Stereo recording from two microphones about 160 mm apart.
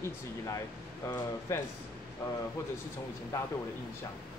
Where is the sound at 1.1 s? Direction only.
20° left (ahead or behind).